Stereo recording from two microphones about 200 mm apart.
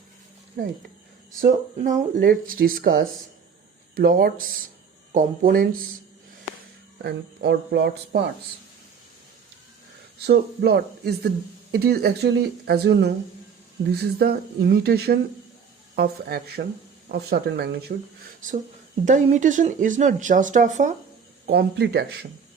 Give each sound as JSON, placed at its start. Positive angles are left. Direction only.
{"t": 0.6, "sound": "speech", "side_deg": -45}
{"t": 7.0, "sound": "speech", "side_deg": -55}
{"t": 10.2, "sound": "speech", "side_deg": -60}
{"t": 18.3, "sound": "speech", "side_deg": -40}
{"t": 21.4, "sound": "speech", "side_deg": -55}